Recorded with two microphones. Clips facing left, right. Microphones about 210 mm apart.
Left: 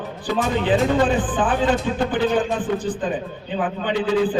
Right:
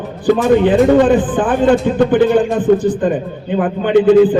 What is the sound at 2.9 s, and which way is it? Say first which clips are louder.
Speech: right 9 dB; 60° right (ahead or behind).